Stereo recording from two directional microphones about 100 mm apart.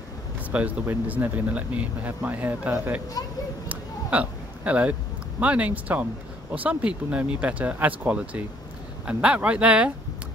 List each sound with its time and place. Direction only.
0.5 s speech: 15° right (ahead or behind)
3.6 s a sound: 15° right (ahead or behind)
5.4 s speech: 15° right (ahead or behind)